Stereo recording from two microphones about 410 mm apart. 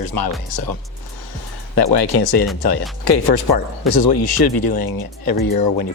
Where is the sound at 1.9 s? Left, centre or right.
Left.